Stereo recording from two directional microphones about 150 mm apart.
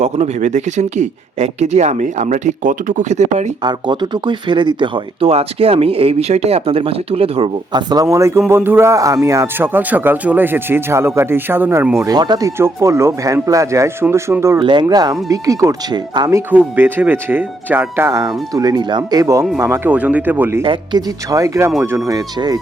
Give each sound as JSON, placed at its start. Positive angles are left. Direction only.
{"t": 0.0, "sound": "speech", "side_deg": -50}
{"t": 3.6, "sound": "speech", "side_deg": -30}
{"t": 12.0, "sound": "speech", "side_deg": -25}
{"t": 14.6, "sound": "speech", "side_deg": -30}
{"t": 16.5, "sound": "speech", "side_deg": -10}
{"t": 20.7, "sound": "speech", "side_deg": -25}